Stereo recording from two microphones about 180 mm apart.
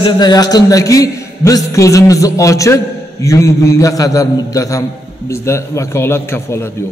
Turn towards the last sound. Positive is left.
turn(degrees=15)  # may be behind; listen again after turning